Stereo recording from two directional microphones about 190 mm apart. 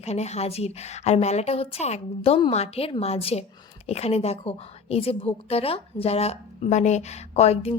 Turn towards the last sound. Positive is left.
turn(degrees=35)  # may be behind; listen again after turning